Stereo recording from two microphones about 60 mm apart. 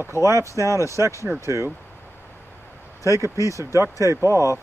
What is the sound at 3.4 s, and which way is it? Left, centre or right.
Speech, left.